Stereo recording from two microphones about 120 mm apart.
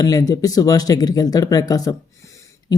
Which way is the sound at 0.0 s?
30° left (ahead or behind).